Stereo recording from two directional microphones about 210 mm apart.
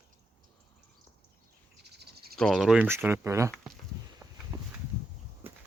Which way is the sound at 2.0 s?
50° right (ahead or behind).